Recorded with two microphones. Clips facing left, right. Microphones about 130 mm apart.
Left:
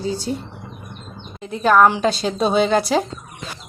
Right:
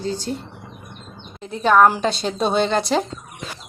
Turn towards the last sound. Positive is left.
turn(degrees=5)  # may be behind; listen again after turning